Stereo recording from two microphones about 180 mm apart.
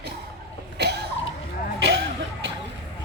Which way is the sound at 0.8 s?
65° right (ahead or behind).